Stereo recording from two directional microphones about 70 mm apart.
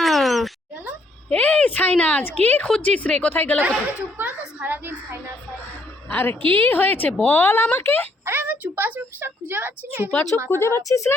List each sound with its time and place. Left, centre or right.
0.0 s a sound: centre
1.3 s a woman's voice: centre
3.6 s a woman's voice: right
6.1 s a woman's voice: left
8.2 s a woman's voice: right
10.1 s a woman's voice: left
10.5 s speech: left
10.8 s a woman's voice: left